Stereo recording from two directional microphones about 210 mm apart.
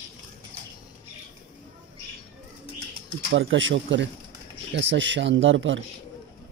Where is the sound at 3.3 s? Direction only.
65° right (ahead or behind).